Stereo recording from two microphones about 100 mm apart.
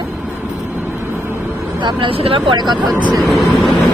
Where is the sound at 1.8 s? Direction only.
50° right (ahead or behind); by 2.4 s 70° right (ahead or behind).